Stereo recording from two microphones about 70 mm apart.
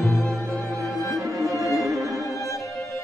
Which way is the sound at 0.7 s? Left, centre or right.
Right.